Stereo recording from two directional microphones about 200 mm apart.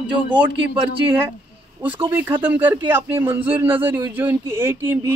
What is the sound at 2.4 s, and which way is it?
Speech, 10° right (ahead or behind).